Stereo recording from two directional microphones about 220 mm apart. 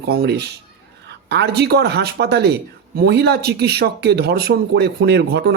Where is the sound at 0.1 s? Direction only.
45° right (ahead or behind).